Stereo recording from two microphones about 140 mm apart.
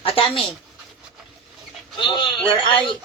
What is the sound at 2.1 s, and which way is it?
Speech, 35° left (ahead or behind).